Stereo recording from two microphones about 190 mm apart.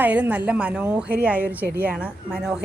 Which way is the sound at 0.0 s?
10° right (ahead or behind).